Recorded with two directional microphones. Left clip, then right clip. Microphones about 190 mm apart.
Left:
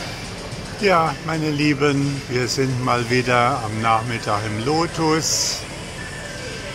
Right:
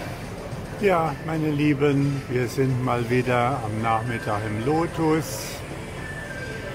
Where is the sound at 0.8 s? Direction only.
Centre (ahead or behind).